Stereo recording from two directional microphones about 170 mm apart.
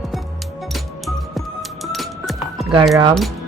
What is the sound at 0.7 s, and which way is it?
Music, centre (ahead or behind).